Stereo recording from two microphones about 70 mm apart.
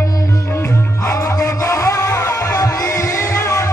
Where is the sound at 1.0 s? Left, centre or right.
Left.